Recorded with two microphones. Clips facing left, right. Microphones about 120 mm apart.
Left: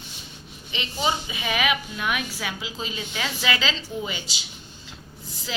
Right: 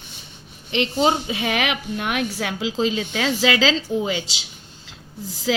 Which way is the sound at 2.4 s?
90° right.